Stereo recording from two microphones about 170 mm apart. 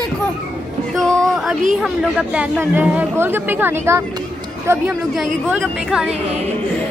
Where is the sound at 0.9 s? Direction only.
Centre (ahead or behind).